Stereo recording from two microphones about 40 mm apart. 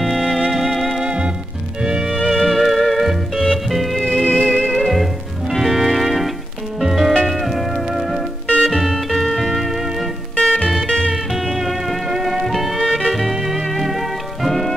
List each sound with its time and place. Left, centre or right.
0.0 s music: centre
1.0 s music: right
2.1 s music: centre
4.0 s music: centre
4.7 s music: centre